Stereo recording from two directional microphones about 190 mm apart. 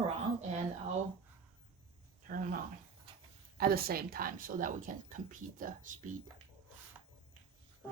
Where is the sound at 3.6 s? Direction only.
50° right (ahead or behind).